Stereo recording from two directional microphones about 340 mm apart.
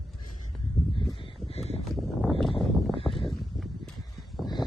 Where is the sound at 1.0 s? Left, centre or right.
Centre.